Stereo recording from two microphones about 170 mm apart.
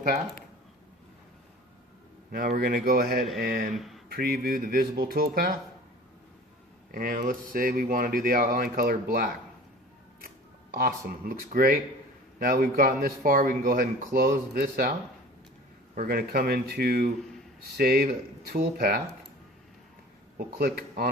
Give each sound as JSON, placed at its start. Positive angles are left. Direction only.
{"t": 2.3, "sound": "speech", "side_deg": -60}
{"t": 3.8, "sound": "speech", "side_deg": 0}
{"t": 4.1, "sound": "speech", "side_deg": -65}
{"t": 6.9, "sound": "speech", "side_deg": -55}
{"t": 10.8, "sound": "speech", "side_deg": -55}
{"t": 16.0, "sound": "speech", "side_deg": -60}
{"t": 20.4, "sound": "speech", "side_deg": -60}